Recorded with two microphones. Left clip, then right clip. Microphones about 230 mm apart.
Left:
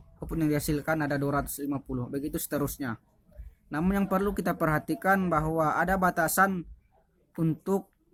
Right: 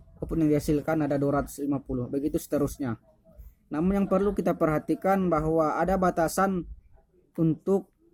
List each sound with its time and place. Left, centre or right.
0.2 s speech: left